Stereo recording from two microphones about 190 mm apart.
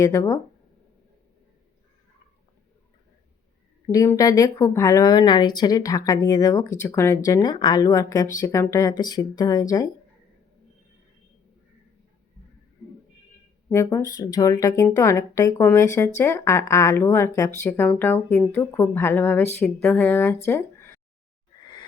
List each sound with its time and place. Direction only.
0.0 s a woman's voice: 15° left (ahead or behind)
3.9 s speech: 15° left (ahead or behind)
13.7 s a woman's voice: 15° left (ahead or behind)